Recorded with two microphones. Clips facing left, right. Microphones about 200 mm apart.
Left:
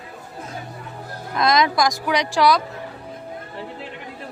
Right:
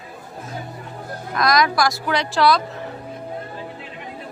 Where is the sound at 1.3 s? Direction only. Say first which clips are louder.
Even; 25° left (ahead or behind).